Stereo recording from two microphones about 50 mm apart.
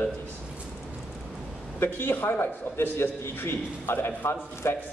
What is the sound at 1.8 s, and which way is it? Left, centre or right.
A man's voice, left.